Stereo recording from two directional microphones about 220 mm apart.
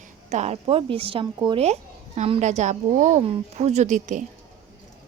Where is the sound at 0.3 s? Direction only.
30° right (ahead or behind).